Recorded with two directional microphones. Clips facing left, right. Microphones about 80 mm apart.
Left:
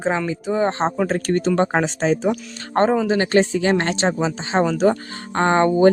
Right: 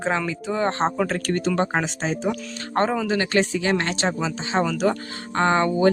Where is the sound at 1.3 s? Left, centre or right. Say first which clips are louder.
Left 6 dB; left.